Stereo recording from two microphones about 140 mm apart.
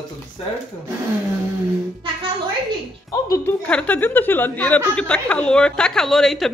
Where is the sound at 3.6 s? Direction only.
10° left (ahead or behind).